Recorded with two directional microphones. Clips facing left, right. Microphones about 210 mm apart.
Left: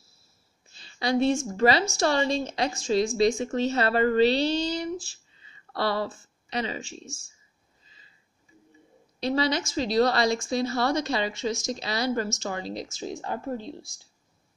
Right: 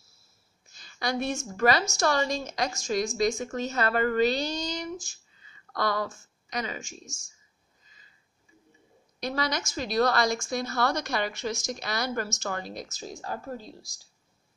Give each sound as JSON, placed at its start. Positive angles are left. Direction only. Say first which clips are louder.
{"t": 0.7, "sound": "a sound", "louder": "left 4 dB", "side_deg": 30}
{"t": 1.6, "sound": "a woman's voice", "louder": "even", "side_deg": 25}
{"t": 7.8, "sound": "sniff", "louder": "left 2 dB", "side_deg": 30}
{"t": 9.2, "sound": "a woman's voice", "louder": "left 5 dB", "side_deg": 25}